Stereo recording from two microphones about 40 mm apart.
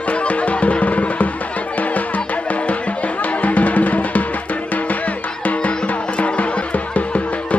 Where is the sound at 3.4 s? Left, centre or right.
Left.